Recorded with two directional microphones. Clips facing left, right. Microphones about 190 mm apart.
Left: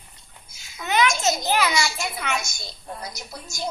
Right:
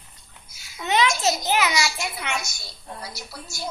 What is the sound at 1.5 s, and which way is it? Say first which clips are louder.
Speech: even; 15° right (ahead or behind).